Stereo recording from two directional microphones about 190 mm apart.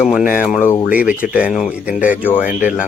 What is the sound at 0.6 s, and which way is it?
Speech, 10° left (ahead or behind).